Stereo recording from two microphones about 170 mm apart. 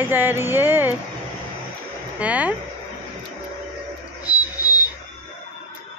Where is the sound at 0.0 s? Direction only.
10° right (ahead or behind).